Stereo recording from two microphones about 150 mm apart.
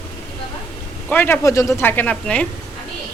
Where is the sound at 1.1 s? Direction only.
15° left (ahead or behind).